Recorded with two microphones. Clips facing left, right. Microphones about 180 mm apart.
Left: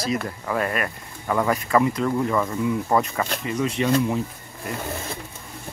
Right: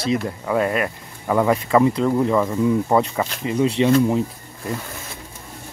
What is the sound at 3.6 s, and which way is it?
Speech, 30° right (ahead or behind).